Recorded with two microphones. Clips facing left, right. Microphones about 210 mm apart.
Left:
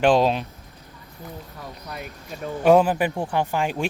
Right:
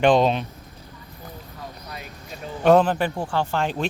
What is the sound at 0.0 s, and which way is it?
Speech, 5° left (ahead or behind).